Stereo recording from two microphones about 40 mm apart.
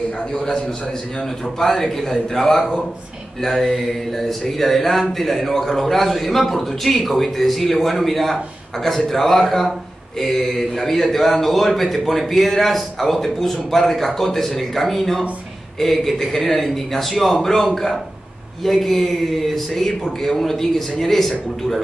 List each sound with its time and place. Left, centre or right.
0.3 s speech: centre
1.6 s speech: centre